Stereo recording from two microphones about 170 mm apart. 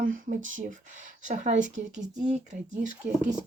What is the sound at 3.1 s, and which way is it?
Speech, 5° right (ahead or behind).